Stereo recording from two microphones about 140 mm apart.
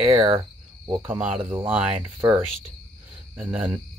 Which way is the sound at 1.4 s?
40° right (ahead or behind).